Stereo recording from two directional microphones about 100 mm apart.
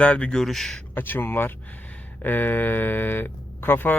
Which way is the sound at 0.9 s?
20° left (ahead or behind).